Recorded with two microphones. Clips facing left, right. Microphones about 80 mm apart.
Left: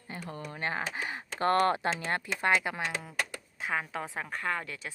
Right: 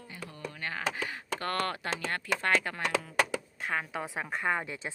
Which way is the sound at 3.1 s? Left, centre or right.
Right.